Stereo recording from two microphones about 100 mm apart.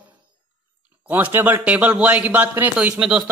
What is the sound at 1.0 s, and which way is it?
A man's voice, 15° right (ahead or behind).